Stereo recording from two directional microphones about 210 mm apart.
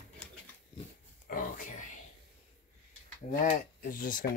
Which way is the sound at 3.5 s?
40° left (ahead or behind).